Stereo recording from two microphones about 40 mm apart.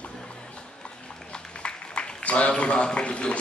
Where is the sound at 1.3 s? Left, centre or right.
Left.